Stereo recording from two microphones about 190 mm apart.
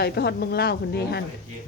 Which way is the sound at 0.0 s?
60° left (ahead or behind).